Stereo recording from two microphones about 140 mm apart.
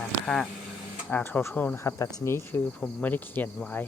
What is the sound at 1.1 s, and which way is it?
Speech, 15° left (ahead or behind).